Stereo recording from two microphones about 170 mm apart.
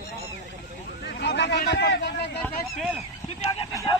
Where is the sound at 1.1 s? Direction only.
80° left.